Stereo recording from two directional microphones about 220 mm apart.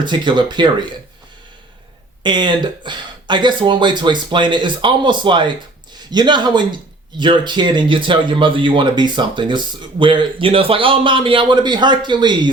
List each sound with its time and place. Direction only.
0.0 s speech: 20° right (ahead or behind)
2.2 s speech: 20° right (ahead or behind)